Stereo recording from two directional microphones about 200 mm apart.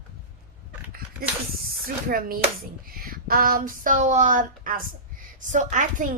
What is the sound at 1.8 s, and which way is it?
A woman's voice, 45° right (ahead or behind).